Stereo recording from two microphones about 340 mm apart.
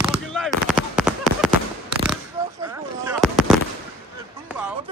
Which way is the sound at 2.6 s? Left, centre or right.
Centre.